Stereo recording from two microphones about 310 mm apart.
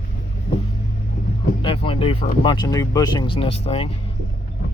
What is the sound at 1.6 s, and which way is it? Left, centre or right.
Speech, centre.